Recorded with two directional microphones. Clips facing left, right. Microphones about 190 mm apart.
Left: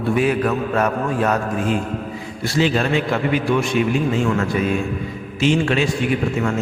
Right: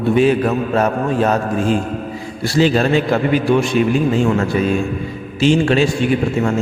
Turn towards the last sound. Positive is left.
turn(degrees=-30)  # may be behind; listen again after turning